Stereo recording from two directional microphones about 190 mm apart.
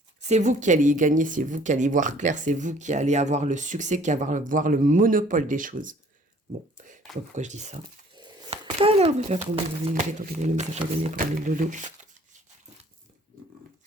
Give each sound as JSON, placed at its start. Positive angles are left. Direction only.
{"t": 0.2, "sound": "speech", "side_deg": -35}
{"t": 7.3, "sound": "speech", "side_deg": -40}
{"t": 8.2, "sound": "a sound", "side_deg": -30}
{"t": 9.9, "sound": "speech", "side_deg": -40}